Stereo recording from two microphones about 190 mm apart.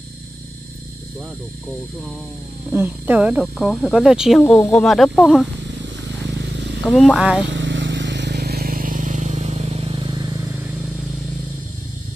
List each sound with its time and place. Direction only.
2.7 s speech: 10° right (ahead or behind)
6.2 s a sound: 65° right (ahead or behind)
6.8 s speech: centre (ahead or behind)
7.4 s vehicle: 70° right (ahead or behind); by 10.4 s 20° right (ahead or behind)